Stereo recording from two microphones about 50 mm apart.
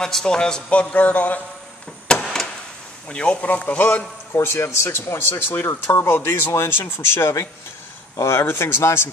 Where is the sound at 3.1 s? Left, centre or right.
Left.